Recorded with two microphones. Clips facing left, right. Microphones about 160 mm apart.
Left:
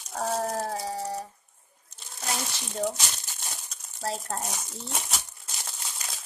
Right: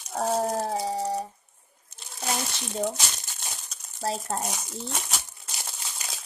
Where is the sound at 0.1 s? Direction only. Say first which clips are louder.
Right 3 dB; 20° right (ahead or behind).